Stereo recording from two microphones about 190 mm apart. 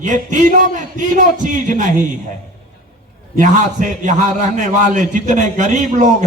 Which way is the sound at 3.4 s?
40° right (ahead or behind).